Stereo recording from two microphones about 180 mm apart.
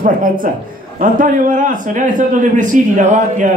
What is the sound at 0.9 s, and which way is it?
A man's voice, 50° right (ahead or behind).